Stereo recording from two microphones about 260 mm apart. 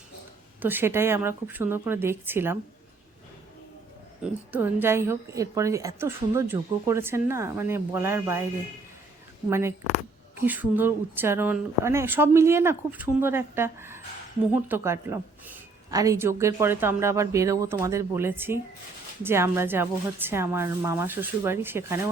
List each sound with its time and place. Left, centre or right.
0.6 s a woman's voice: centre
4.2 s a woman's voice: centre
9.5 s a woman's voice: centre